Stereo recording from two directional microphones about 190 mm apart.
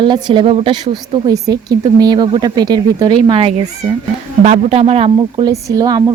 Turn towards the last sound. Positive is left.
turn(degrees=-20)  # may be behind; listen again after turning